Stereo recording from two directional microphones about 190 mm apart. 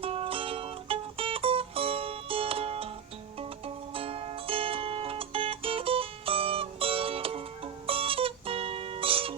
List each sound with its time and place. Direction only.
0.0 s music: 30° right (ahead or behind)
3.9 s music: 30° right (ahead or behind)